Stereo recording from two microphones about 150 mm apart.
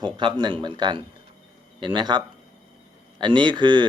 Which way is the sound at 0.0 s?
30° right (ahead or behind).